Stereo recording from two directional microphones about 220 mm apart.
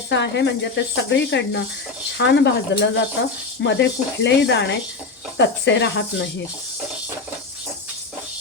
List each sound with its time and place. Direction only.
0.1 s speech: 50° left (ahead or behind)